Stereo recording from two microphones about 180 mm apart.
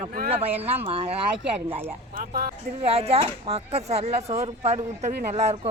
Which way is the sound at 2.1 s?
55° right (ahead or behind).